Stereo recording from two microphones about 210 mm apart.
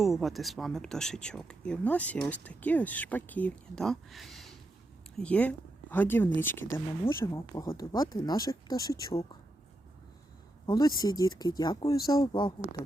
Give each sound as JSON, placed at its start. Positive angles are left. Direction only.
{"t": 0.0, "sound": "speech", "side_deg": 0}
{"t": 10.7, "sound": "speech", "side_deg": 15}